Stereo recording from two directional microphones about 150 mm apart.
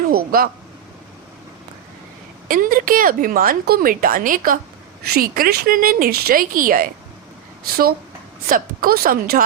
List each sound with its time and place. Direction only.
0.1 s a sound: 75° right (ahead or behind)
2.5 s a woman's voice: 70° right (ahead or behind)
5.0 s a woman's voice: 80° right
8.4 s a woman's voice: 70° right (ahead or behind)